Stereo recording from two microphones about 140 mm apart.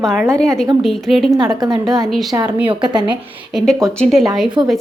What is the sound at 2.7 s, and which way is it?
Speech, 35° right (ahead or behind).